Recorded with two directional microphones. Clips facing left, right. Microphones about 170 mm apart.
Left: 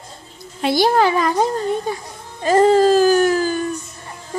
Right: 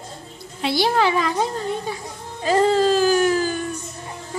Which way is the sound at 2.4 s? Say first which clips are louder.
Left 4 dB; 45° left (ahead or behind).